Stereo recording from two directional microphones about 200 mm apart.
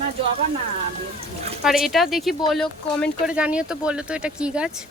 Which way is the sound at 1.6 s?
Centre (ahead or behind).